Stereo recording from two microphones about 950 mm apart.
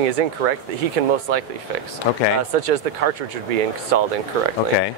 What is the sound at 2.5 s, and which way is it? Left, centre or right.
Speech, right.